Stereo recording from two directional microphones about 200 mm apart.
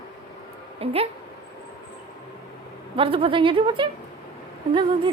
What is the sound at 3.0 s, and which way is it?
A woman's voice, 25° right (ahead or behind).